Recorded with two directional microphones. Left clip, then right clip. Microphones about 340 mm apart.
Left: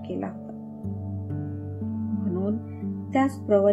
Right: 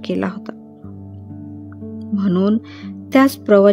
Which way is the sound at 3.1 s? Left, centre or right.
Right.